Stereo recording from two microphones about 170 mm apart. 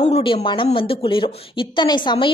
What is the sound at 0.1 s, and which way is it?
A woman's voice, 30° left (ahead or behind).